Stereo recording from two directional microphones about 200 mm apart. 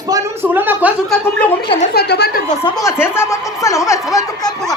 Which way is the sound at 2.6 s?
15° left (ahead or behind).